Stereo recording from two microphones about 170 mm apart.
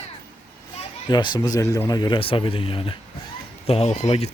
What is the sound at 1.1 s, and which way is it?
Speech, 25° left (ahead or behind).